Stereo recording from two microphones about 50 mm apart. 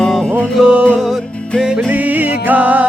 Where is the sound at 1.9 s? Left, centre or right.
Right.